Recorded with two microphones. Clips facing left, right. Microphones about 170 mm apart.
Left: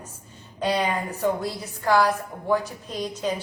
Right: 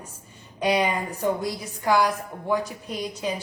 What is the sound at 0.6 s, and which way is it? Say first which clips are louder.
A woman's voice: right 1 dB; 15° right (ahead or behind).